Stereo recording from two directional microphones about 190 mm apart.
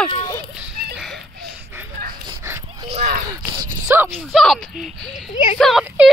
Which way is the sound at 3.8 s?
10° right (ahead or behind).